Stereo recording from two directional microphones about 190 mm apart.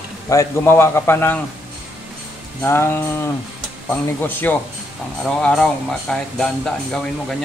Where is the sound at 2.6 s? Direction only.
10° left (ahead or behind).